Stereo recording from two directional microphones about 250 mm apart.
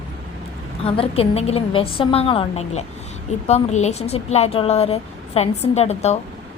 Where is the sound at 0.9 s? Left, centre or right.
Left.